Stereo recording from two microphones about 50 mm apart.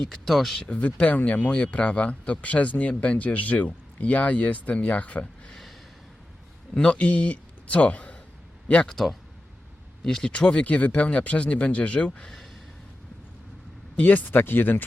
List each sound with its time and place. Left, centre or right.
0.1 s speech: centre
0.8 s speech: left
6.7 s a man's voice: left
8.9 s speech: centre
10.3 s speech: left
12.2 s speech: centre
13.9 s speech: left